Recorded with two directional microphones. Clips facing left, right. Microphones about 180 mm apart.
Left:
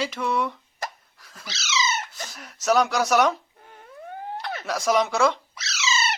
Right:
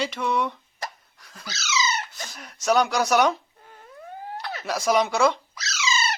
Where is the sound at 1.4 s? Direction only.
25° left (ahead or behind).